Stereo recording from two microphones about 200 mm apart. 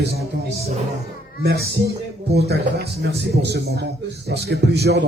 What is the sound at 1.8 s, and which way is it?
Speech, 55° right (ahead or behind).